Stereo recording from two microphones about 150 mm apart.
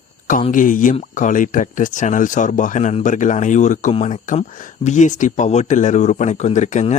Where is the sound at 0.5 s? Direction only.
60° left (ahead or behind).